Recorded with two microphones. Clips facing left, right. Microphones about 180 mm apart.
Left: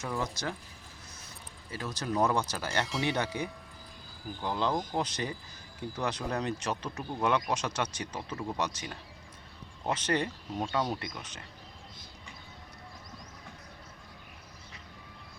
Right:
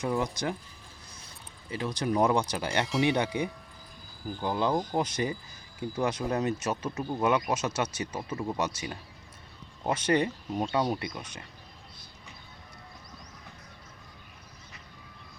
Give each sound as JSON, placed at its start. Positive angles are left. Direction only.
{"t": 0.0, "sound": "speech", "side_deg": -15}
{"t": 1.7, "sound": "speech", "side_deg": -15}